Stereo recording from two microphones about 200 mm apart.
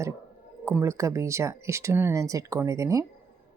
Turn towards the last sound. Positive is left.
turn(degrees=-15)  # may be behind; listen again after turning